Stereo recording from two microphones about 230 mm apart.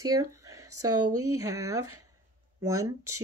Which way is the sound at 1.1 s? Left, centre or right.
Right.